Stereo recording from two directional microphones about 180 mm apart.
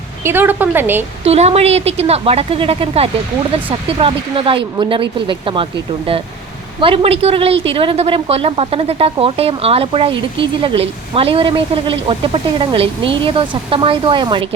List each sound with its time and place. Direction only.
0.3 s a woman's voice: 10° right (ahead or behind)
1.2 s a woman's voice: 35° right (ahead or behind)
6.7 s a woman's voice: 30° right (ahead or behind)